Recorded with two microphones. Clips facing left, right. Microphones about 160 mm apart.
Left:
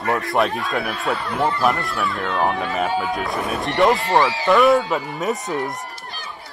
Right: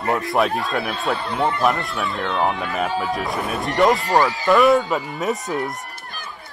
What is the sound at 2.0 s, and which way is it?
Speech, 20° right (ahead or behind).